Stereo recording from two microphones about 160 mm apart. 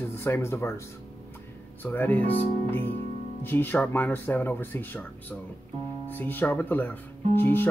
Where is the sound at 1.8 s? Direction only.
10° left (ahead or behind).